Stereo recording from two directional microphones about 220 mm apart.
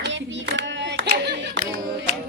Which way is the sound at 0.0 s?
55° right (ahead or behind).